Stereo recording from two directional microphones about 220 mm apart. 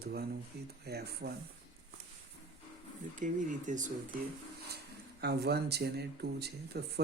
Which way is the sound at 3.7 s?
35° right (ahead or behind).